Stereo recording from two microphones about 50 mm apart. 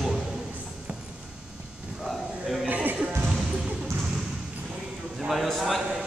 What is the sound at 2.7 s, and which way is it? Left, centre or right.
Music, right.